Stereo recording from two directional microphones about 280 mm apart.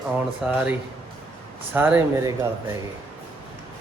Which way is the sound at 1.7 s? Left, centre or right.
Centre.